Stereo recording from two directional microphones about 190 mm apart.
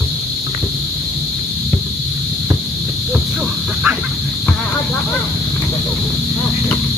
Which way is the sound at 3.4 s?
10° right (ahead or behind).